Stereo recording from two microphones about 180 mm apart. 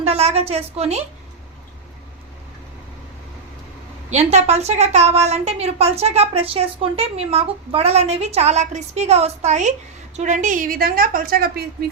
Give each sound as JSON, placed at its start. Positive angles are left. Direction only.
{"t": 0.1, "sound": "a woman's voice", "side_deg": -35}
{"t": 4.1, "sound": "a woman's voice", "side_deg": -40}